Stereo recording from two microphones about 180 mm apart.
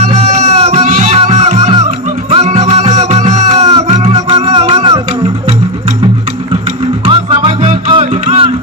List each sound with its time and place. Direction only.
0.0 s music: 40° right (ahead or behind)
4.1 s music: 30° right (ahead or behind)
7.1 s music: 30° right (ahead or behind)